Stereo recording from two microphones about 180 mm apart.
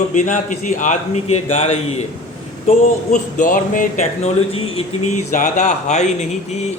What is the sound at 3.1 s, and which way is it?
A man's voice, 45° left (ahead or behind).